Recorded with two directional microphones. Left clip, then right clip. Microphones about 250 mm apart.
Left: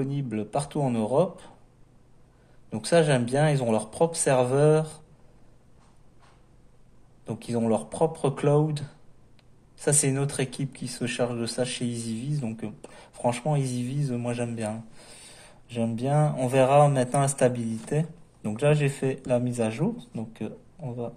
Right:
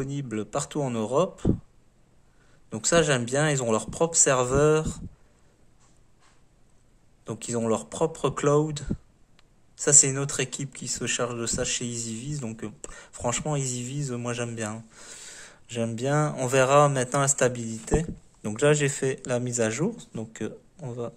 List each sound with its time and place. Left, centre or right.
0.0 s speech: right
2.7 s speech: right
7.2 s speech: right